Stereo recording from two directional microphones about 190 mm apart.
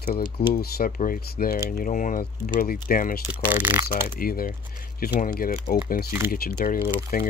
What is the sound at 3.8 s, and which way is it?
Speech, 50° left (ahead or behind).